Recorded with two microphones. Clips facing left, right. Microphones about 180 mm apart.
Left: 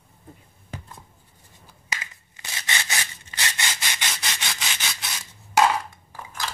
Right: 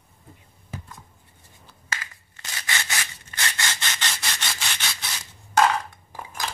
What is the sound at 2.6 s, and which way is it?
Rub, 20° left (ahead or behind).